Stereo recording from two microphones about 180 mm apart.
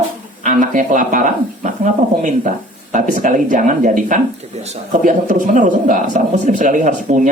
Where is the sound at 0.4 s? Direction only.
45° right (ahead or behind).